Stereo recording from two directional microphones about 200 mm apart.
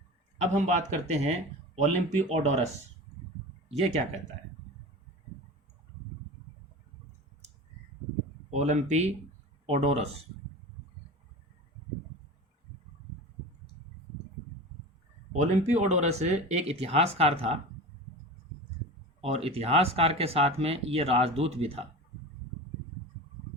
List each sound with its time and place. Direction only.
0.4 s speech: 35° right (ahead or behind)
8.4 s speech: 35° right (ahead or behind)
15.4 s speech: 35° right (ahead or behind)
19.2 s speech: 30° right (ahead or behind)